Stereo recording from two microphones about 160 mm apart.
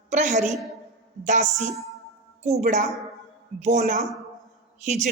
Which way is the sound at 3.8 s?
55° right (ahead or behind).